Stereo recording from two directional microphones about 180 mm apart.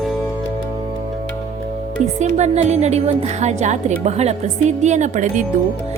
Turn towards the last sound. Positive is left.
turn(degrees=-40)  # may be behind; listen again after turning